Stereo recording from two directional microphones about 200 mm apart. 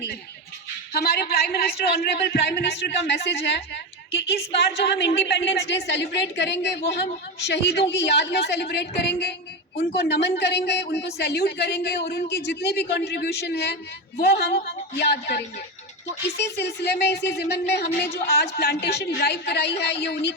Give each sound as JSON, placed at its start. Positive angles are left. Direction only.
{"t": 0.9, "sound": "speech", "side_deg": 50}
{"t": 16.4, "sound": "speech", "side_deg": 55}